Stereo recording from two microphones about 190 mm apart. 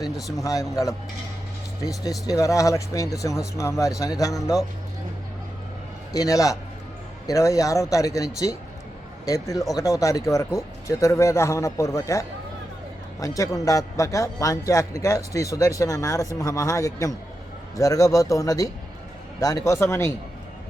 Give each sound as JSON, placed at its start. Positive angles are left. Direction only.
{"t": 0.2, "sound": "speech", "side_deg": 0}
{"t": 0.4, "sound": "a man's voice", "side_deg": 15}
{"t": 6.1, "sound": "a man's voice", "side_deg": 20}